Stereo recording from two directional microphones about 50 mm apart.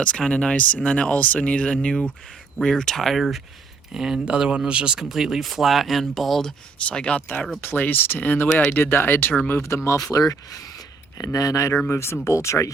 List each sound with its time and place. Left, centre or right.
0.3 s speech: left; by 6.5 s centre
6.7 s speech: left
7.6 s speech: left
9.5 s speech: left
11.3 s speech: left
11.9 s speech: left